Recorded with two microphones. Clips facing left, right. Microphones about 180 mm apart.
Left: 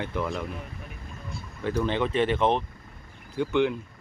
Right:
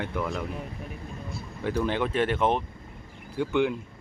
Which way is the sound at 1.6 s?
10° right (ahead or behind).